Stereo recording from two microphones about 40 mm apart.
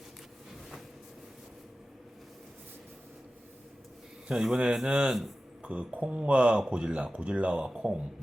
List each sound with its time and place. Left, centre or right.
4.3 s speech: right